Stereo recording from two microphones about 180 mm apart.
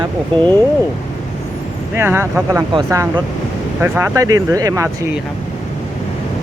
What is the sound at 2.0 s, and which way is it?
Speech, 15° right (ahead or behind).